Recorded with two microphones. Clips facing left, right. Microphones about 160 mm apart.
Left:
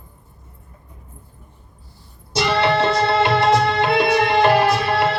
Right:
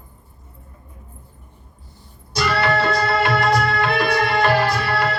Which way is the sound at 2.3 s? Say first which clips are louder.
Left 2 dB; 25° left (ahead or behind).